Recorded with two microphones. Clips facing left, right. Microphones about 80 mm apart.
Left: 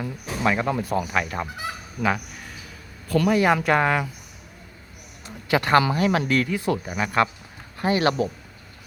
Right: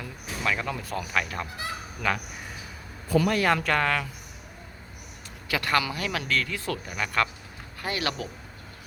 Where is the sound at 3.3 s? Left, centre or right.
Centre.